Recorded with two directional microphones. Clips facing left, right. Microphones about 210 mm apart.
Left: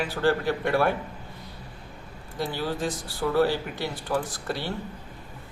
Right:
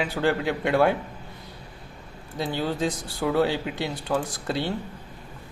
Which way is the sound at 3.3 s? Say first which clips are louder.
Even; 20° right (ahead or behind).